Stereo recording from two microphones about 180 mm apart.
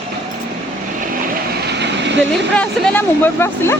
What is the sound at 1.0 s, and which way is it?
Vehicle, 60° right (ahead or behind).